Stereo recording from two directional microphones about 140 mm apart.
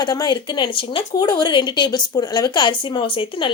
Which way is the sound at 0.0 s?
30° left (ahead or behind).